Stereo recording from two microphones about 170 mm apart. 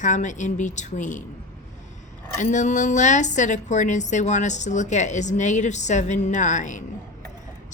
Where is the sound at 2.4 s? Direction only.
45° left (ahead or behind).